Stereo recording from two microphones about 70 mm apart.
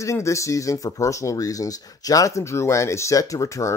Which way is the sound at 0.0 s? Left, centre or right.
Left.